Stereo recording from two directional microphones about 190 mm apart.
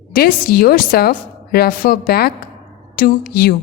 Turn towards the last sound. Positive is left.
turn(degrees=55)  # may be behind; listen again after turning